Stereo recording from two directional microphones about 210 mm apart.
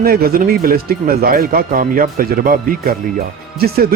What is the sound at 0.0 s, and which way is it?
Speech, 45° right (ahead or behind).